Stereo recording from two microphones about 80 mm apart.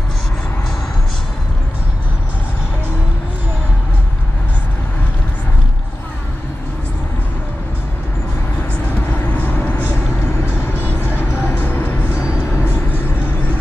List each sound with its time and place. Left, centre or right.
9.1 s vehicle: left
10.8 s music: right
11.4 s music: left